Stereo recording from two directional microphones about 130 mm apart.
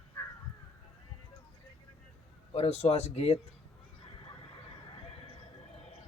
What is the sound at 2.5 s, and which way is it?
Speech, 50° left (ahead or behind).